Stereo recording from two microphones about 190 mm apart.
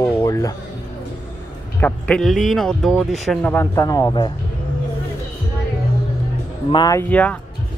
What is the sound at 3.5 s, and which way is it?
Speech, 15° left (ahead or behind).